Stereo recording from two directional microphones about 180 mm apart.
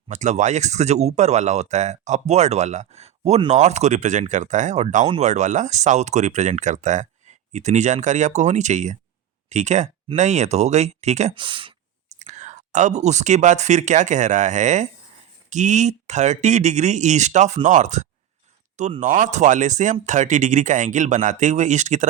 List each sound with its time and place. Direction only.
0.1 s speech: 40° right (ahead or behind)
11.3 s speech: 25° right (ahead or behind)
12.2 s speech: 40° right (ahead or behind)